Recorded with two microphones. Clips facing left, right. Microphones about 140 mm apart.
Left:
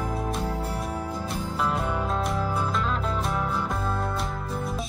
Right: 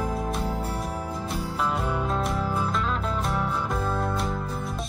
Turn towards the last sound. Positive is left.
turn(degrees=0)  # may be behind; listen again after turning